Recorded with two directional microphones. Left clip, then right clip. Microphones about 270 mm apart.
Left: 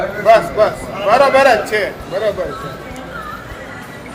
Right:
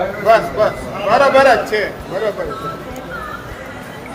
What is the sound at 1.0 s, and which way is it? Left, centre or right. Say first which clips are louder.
Speech: even; left.